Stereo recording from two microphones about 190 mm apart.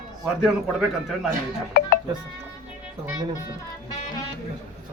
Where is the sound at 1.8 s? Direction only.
55° left (ahead or behind).